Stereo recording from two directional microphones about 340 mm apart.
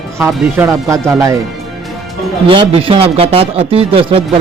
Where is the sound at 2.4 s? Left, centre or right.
Centre.